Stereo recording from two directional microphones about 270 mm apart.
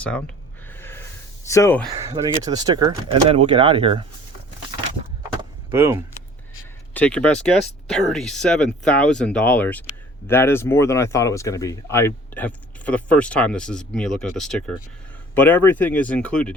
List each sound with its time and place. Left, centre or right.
0.7 s snort: centre
1.5 s speech: centre
1.9 s speech: centre
5.4 s vehicle: centre
6.9 s speech: centre